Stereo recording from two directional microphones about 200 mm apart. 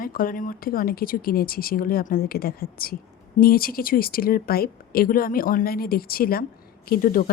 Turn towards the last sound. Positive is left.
turn(degrees=45)  # may be behind; listen again after turning